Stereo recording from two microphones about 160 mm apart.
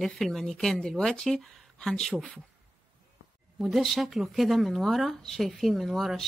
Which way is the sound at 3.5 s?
Centre (ahead or behind).